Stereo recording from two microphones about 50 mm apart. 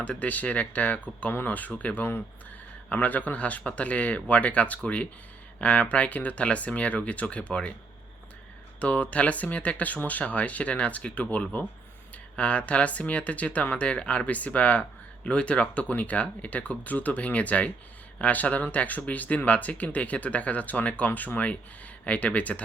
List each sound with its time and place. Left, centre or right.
0.0 s speech: left
8.8 s speech: left